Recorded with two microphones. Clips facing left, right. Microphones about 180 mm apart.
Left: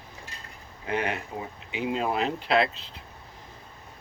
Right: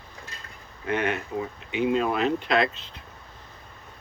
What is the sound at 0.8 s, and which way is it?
Speech, 30° left (ahead or behind).